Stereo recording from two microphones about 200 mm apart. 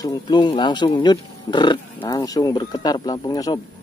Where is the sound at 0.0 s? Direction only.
20° left (ahead or behind).